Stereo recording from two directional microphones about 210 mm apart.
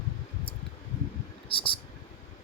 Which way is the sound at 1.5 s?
25° left (ahead or behind).